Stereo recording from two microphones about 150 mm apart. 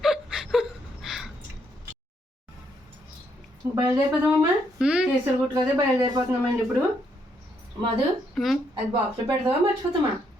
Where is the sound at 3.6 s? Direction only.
15° right (ahead or behind).